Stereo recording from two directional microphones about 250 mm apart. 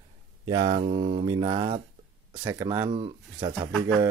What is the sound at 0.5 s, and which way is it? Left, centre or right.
Speech, centre.